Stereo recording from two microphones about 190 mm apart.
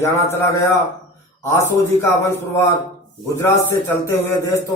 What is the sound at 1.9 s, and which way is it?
Speech, 15° left (ahead or behind).